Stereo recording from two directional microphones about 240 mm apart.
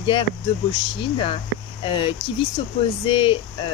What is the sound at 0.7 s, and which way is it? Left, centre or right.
Speech, left.